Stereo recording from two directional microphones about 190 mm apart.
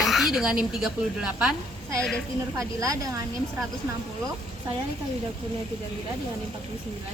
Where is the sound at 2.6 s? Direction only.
15° right (ahead or behind).